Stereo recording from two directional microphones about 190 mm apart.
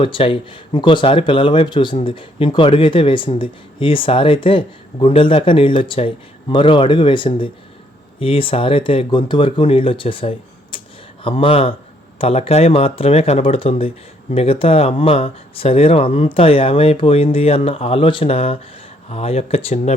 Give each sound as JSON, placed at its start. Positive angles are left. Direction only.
{"t": 0.0, "sound": "speech", "side_deg": 30}